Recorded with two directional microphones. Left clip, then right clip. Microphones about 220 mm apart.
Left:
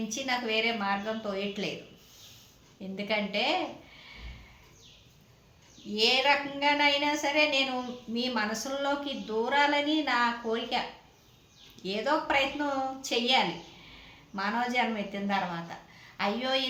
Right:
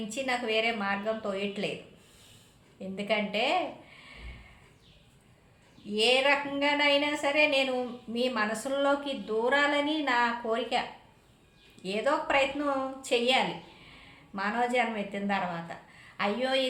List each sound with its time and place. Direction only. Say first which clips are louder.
0.1 s a woman's voice: right 1 dB; 15° right (ahead or behind)
2.9 s a woman's voice: right 1 dB; 15° right (ahead or behind)
5.9 s a woman's voice: even; 15° right (ahead or behind)
11.8 s a woman's voice: even; 15° right (ahead or behind)